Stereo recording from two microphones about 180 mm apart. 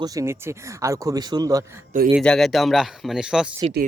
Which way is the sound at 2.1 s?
5° left (ahead or behind).